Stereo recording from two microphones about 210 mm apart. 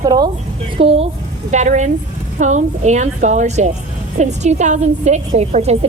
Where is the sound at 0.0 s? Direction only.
20° right (ahead or behind).